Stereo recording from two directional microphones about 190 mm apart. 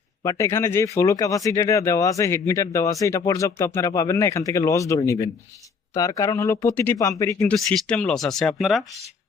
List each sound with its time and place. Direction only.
0.2 s speech: 15° left (ahead or behind)
7.5 s speech: 5° left (ahead or behind)